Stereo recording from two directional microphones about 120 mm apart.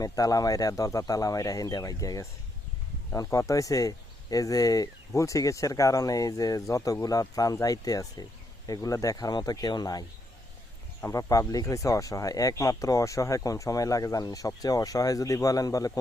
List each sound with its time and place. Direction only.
0.0 s speech: 30° left (ahead or behind)
3.2 s speech: 25° left (ahead or behind)